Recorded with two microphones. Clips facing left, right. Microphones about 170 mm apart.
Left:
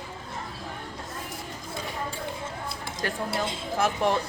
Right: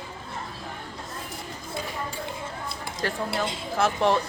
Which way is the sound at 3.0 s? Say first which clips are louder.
Right 1 dB; 20° left (ahead or behind).